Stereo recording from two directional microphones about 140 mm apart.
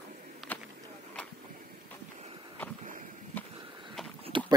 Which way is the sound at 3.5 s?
35° right (ahead or behind).